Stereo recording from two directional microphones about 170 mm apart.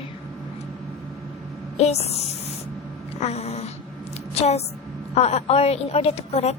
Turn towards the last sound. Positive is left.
turn(degrees=35)  # may be behind; listen again after turning